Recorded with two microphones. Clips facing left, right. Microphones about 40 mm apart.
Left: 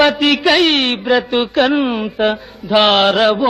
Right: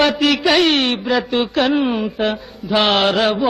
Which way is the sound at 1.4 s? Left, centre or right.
Centre.